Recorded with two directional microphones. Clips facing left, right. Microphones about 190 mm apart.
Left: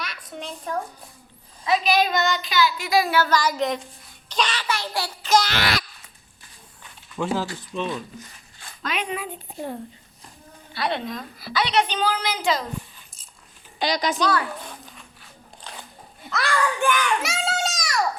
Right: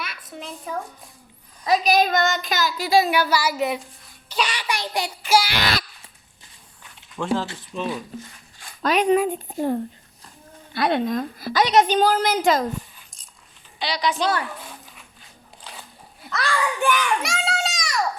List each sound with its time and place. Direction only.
0.0 s a sound: 5° right (ahead or behind)
1.6 s a woman's voice: 40° right (ahead or behind)
3.1 s child singing: 10° right (ahead or behind)
7.2 s speech: 5° left (ahead or behind)
7.7 s child singing: 5° right (ahead or behind)
8.8 s speech: 40° right (ahead or behind)
10.8 s a woman's voice: 45° right (ahead or behind)
13.7 s speech: 45° left (ahead or behind)
16.3 s child singing: 5° right (ahead or behind)
17.2 s a sound: centre (ahead or behind)